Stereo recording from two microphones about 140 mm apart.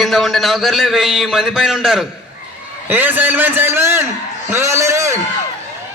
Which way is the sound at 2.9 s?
15° right (ahead or behind).